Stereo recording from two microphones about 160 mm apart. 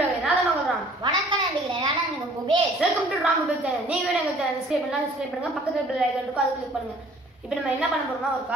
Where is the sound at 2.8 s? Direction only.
5° right (ahead or behind).